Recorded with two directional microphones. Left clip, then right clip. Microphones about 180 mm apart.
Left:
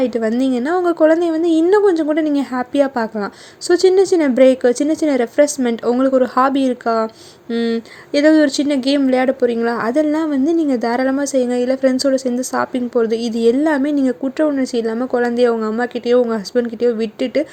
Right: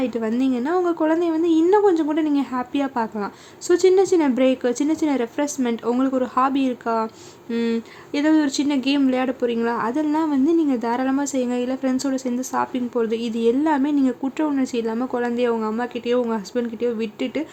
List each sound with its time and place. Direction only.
0.0 s speech: 25° left (ahead or behind)